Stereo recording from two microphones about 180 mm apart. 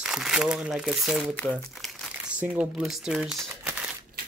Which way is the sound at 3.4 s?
10° right (ahead or behind).